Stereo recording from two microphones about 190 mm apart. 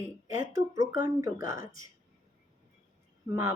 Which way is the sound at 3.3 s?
15° right (ahead or behind).